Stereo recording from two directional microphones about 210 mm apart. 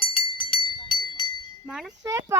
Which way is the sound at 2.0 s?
15° right (ahead or behind).